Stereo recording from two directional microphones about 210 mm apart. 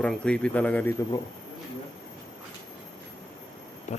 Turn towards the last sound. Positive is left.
turn(degrees=35)  # may be behind; listen again after turning